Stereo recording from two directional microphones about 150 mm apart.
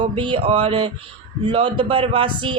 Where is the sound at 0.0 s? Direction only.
35° right (ahead or behind).